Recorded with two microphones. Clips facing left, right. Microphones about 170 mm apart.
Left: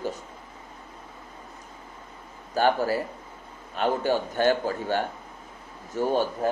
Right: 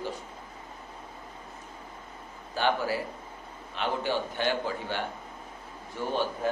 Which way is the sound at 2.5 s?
45° left (ahead or behind).